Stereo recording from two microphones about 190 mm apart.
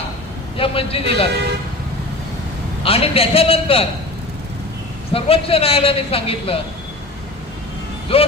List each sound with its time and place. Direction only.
0.5 s a man's voice: 30° left (ahead or behind)
2.8 s a man's voice: 30° left (ahead or behind)
5.1 s a man's voice: 30° left (ahead or behind)
8.1 s a man's voice: 30° left (ahead or behind)